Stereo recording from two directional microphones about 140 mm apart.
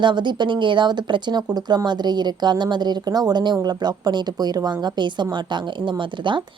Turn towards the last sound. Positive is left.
turn(degrees=-35)  # may be behind; listen again after turning